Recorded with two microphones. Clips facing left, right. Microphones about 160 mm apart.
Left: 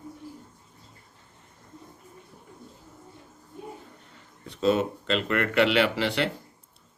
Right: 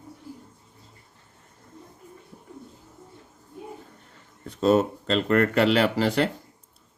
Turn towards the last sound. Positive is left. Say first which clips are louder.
# right 3 dB
turn(degrees=-45)  # may be behind; listen again after turning